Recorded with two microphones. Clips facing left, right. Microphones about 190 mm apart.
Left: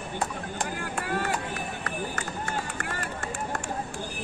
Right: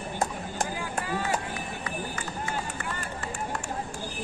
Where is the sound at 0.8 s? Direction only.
60° left (ahead or behind).